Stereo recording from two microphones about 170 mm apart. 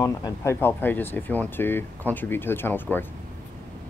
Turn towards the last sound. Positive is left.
turn(degrees=10)  # may be behind; listen again after turning